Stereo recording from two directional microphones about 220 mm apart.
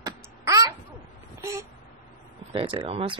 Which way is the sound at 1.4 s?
15° right (ahead or behind).